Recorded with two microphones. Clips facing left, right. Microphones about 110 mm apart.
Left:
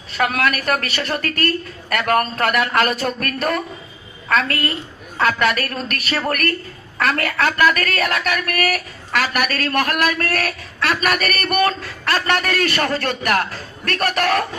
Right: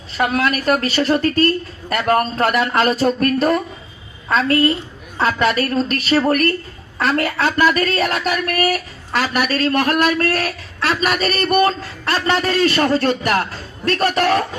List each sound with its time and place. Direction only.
0.2 s a woman's voice: 25° right (ahead or behind)